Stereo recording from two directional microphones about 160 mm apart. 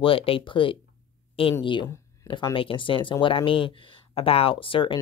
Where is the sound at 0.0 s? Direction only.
35° left (ahead or behind).